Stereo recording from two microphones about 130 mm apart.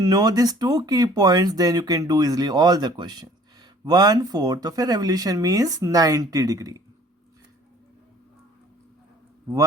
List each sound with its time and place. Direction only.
0.0 s speech: 30° right (ahead or behind)